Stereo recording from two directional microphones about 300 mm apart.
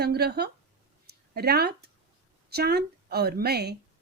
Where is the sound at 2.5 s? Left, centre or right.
Right.